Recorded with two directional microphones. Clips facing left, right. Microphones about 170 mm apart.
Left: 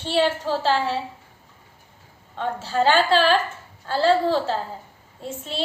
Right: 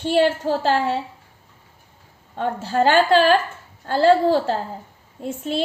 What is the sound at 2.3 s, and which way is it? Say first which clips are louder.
A woman's voice: right 3 dB; 50° right (ahead or behind).